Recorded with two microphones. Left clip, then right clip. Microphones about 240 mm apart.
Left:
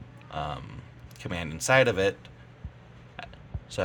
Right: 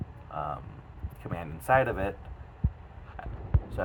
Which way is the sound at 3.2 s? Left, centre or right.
Left.